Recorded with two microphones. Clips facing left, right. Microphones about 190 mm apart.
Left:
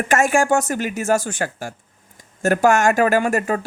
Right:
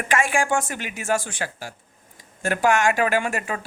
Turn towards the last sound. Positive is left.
turn(degrees=40)  # may be behind; listen again after turning